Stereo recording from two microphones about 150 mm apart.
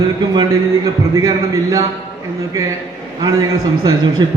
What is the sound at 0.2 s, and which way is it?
A man's voice, 25° right (ahead or behind).